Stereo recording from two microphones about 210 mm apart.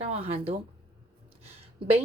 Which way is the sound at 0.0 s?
30° right (ahead or behind).